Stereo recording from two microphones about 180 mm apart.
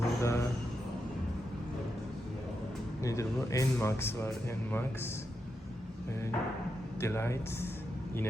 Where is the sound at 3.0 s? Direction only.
15° left (ahead or behind).